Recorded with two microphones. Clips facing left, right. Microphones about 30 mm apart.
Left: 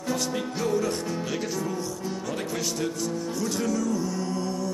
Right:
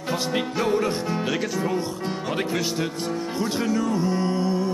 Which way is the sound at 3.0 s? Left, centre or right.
Right.